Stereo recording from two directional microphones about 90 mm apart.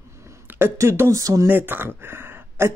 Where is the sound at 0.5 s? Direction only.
25° right (ahead or behind).